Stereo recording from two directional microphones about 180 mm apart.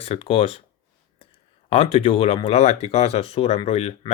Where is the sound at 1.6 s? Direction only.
35° left (ahead or behind).